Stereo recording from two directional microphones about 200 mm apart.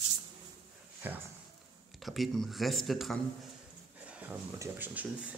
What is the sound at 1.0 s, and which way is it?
Speech, 10° right (ahead or behind).